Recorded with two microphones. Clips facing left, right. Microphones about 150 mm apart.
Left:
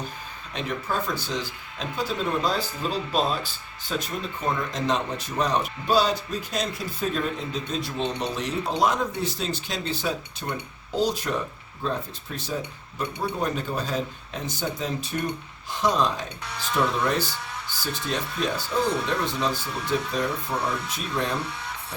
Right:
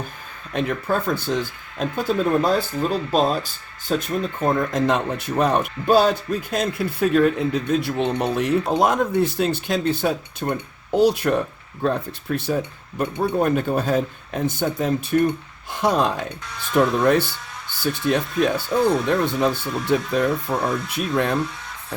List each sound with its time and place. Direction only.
0.5 s speech: 55° right (ahead or behind)